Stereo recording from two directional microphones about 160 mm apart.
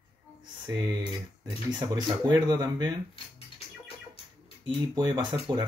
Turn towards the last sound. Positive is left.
turn(degrees=-25)  # may be behind; listen again after turning